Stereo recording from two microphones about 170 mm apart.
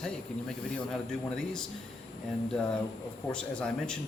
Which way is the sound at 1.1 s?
5° left (ahead or behind).